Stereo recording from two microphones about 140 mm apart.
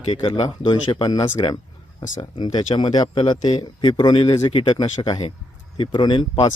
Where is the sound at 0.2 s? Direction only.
40° left (ahead or behind).